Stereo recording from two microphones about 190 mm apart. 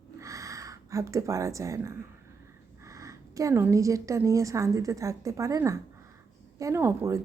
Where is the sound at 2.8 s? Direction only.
15° right (ahead or behind).